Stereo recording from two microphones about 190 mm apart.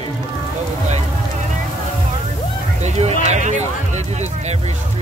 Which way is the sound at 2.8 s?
35° right (ahead or behind).